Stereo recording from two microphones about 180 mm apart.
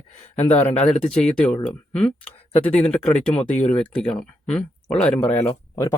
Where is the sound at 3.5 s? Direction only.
40° left (ahead or behind).